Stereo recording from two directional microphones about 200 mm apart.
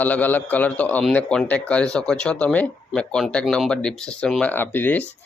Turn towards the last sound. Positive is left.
turn(degrees=10)  # may be behind; listen again after turning